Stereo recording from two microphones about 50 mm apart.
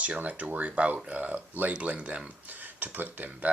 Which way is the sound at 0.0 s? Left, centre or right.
Right.